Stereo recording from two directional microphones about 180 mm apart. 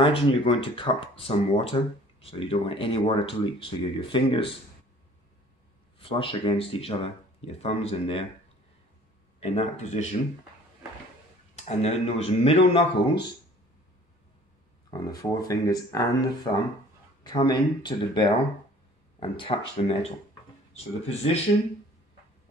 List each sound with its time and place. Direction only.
0.0 s speech: 30° left (ahead or behind)
5.9 s speech: 30° left (ahead or behind)
9.4 s speech: 35° left (ahead or behind)
11.5 s speech: 40° left (ahead or behind)
14.9 s speech: 20° left (ahead or behind)